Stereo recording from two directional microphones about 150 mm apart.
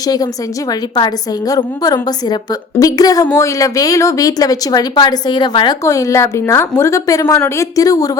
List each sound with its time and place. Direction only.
0.0 s a woman's voice: 25° left (ahead or behind)